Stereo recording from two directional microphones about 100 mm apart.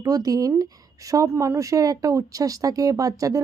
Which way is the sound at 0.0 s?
35° right (ahead or behind).